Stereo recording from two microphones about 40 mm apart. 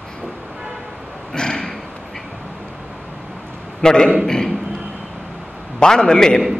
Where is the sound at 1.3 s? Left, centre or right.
Centre.